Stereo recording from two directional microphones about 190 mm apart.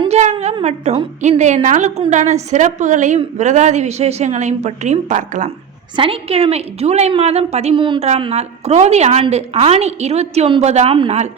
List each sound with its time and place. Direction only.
0.0 s a woman's voice: 35° right (ahead or behind)